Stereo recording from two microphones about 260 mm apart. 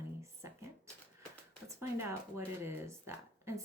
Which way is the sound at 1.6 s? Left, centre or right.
Centre.